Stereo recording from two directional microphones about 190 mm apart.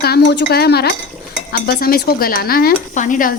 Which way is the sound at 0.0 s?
60° left (ahead or behind).